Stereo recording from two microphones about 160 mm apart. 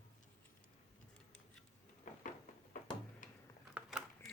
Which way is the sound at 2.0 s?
55° left (ahead or behind).